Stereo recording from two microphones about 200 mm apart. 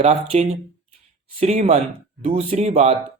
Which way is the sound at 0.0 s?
35° right (ahead or behind).